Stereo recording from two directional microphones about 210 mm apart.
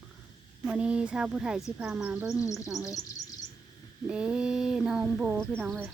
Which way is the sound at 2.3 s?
15° left (ahead or behind).